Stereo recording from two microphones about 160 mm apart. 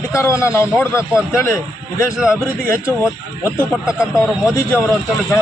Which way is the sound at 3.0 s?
15° left (ahead or behind).